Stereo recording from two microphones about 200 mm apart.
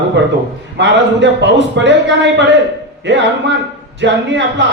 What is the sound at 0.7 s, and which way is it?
A man's voice, 60° right (ahead or behind).